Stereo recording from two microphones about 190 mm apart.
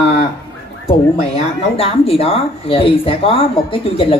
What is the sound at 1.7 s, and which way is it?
Speech, 30° left (ahead or behind).